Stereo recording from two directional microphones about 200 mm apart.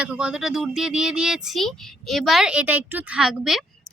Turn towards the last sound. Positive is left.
turn(degrees=0)  # may be behind; listen again after turning